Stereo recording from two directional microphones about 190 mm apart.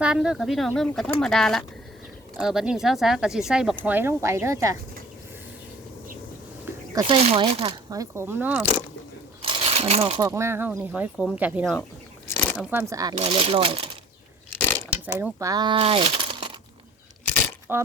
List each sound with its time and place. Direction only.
0.0 s speech: 5° right (ahead or behind)
7.1 s speech: 30° right (ahead or behind); by 8.6 s 10° right (ahead or behind)
9.4 s a sound: 30° right (ahead or behind)
10.2 s speech: 15° right (ahead or behind)
12.7 s speech: 15° right (ahead or behind)
13.1 s speech: 30° right (ahead or behind)
14.5 s mechanisms: 10° left (ahead or behind)
15.0 s speech: 10° right (ahead or behind)
17.7 s speech: 10° right (ahead or behind)